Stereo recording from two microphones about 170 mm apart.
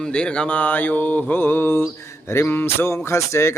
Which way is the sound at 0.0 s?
5° left (ahead or behind).